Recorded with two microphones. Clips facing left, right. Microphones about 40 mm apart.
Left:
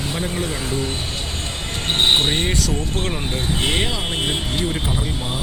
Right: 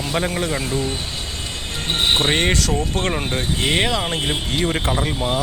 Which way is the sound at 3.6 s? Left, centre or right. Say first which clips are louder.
Right 3 dB; right.